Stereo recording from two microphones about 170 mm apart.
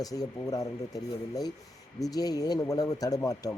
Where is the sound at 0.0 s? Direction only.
20° left (ahead or behind).